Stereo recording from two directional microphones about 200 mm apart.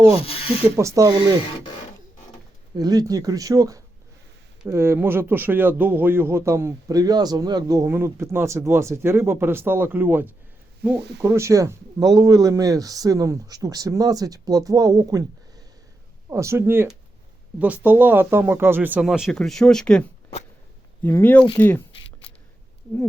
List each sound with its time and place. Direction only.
0.2 s a sound: 30° left (ahead or behind)
0.8 s speech: 15° right (ahead or behind)
2.7 s speech: 20° right (ahead or behind)
16.3 s speech: 15° right (ahead or behind); by 21.8 s 10° left (ahead or behind)